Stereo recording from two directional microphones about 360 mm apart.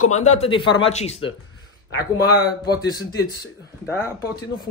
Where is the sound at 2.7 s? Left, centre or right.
Centre.